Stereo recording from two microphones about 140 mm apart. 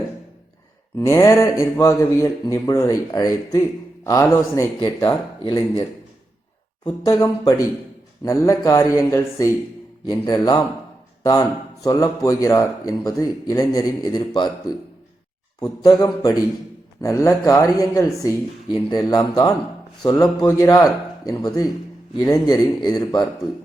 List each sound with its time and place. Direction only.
0.9 s speech: 20° left (ahead or behind)
6.8 s speech: 25° left (ahead or behind)
15.8 s speech: 30° left (ahead or behind)